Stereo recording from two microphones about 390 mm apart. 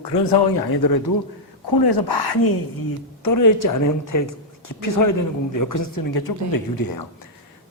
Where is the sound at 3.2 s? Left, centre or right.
Left.